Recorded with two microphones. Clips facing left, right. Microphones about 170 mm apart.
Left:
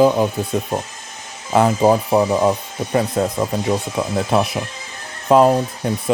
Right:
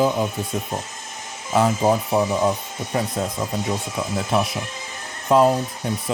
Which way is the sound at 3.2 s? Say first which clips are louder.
Left 6 dB; 80° left.